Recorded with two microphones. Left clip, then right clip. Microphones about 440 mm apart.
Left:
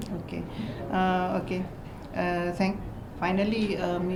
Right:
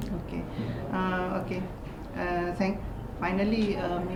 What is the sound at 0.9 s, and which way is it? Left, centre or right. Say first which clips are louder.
Speech: left 4 dB; left.